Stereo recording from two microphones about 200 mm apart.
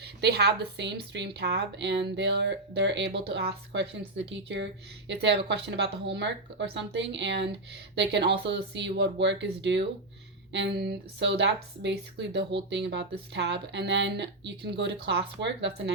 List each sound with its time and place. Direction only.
0.0 s speech: 55° right (ahead or behind)